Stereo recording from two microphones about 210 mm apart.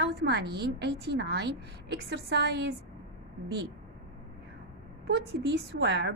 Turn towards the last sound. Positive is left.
turn(degrees=-55)  # may be behind; listen again after turning